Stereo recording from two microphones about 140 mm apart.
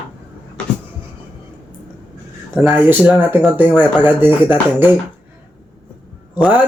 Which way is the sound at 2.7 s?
10° right (ahead or behind).